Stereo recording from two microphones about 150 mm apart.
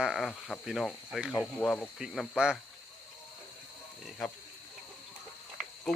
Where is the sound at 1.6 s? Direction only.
10° left (ahead or behind).